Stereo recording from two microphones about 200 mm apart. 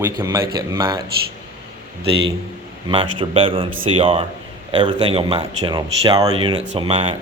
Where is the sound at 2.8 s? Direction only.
25° right (ahead or behind).